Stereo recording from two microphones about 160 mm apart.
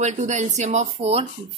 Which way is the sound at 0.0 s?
45° right (ahead or behind).